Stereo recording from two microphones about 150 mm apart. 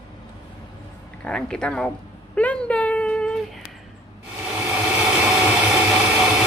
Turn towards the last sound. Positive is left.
turn(degrees=-5)  # may be behind; listen again after turning